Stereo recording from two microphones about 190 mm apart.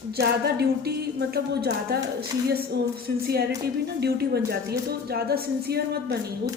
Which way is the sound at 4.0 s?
60° right (ahead or behind).